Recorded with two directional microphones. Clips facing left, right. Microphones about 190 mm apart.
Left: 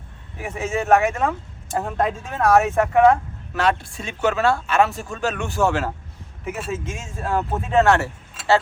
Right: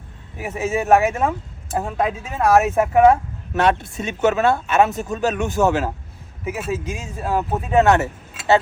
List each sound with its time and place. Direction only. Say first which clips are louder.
0.6 s speech: right 2 dB; 5° right (ahead or behind)
1.1 s speech: right 2 dB; 15° right (ahead or behind)
1.7 s speech: right 1 dB; 5° right (ahead or behind)
6.4 s speech: right 3 dB; 5° right (ahead or behind)
7.3 s speech: right 2 dB; 15° right (ahead or behind)